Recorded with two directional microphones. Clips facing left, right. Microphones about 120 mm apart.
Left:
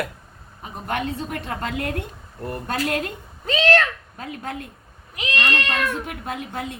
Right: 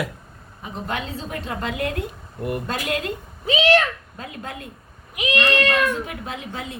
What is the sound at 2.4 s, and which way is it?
Speech, 15° right (ahead or behind).